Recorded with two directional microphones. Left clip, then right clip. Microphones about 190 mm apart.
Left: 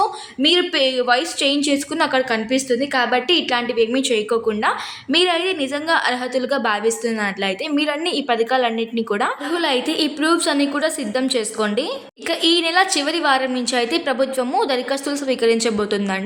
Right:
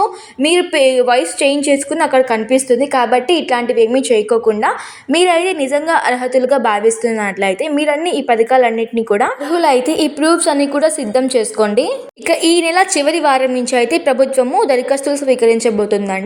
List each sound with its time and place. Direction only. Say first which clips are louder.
0.0 s a woman's voice: right 3 dB; 15° right (ahead or behind)